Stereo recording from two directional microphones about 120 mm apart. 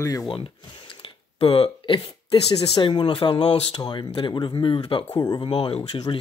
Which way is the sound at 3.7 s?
35° left (ahead or behind).